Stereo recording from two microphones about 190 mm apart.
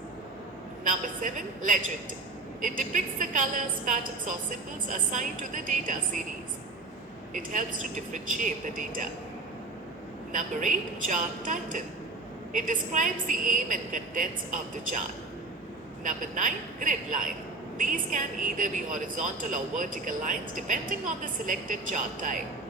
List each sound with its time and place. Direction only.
0.9 s a woman's voice: 45° right (ahead or behind)
7.3 s a woman's voice: 45° right (ahead or behind)
10.3 s a woman's voice: 45° right (ahead or behind)
16.0 s a woman's voice: 45° right (ahead or behind)